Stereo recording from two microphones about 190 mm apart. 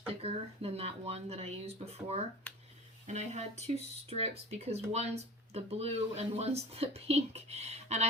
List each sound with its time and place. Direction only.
0.2 s speech: 30° right (ahead or behind)
2.5 s a sound: 5° left (ahead or behind)
3.1 s speech: 35° right (ahead or behind)